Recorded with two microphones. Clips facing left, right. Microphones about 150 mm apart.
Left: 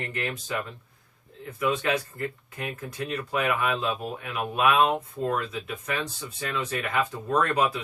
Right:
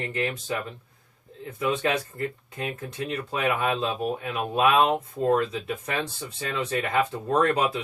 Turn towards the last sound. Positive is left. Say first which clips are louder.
# right 2 dB
turn(degrees=-25)  # may be behind; listen again after turning